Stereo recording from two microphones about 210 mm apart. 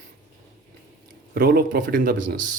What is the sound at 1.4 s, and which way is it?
Speech, 45° right (ahead or behind).